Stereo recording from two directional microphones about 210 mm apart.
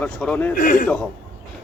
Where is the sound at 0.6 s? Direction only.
40° left (ahead or behind).